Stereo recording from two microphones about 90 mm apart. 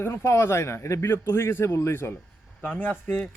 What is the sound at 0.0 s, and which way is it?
A man's voice, 30° left (ahead or behind).